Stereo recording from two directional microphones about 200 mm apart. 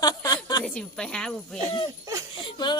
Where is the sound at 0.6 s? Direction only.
5° left (ahead or behind).